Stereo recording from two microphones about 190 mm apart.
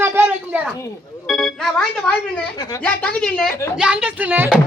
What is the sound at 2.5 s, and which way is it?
Speech, 20° left (ahead or behind).